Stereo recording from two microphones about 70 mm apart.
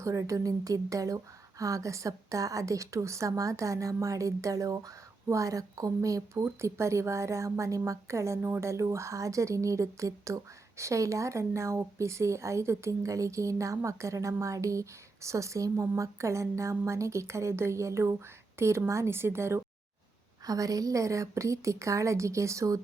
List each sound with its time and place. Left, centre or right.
0.0 s speech: right
20.5 s speech: right